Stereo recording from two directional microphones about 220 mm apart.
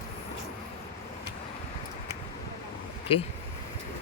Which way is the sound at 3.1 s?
25° left (ahead or behind).